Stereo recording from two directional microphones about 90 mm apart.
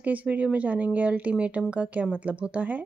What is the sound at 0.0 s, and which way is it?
Speech, 15° right (ahead or behind).